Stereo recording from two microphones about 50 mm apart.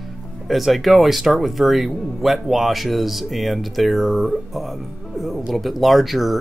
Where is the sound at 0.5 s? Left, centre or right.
Centre.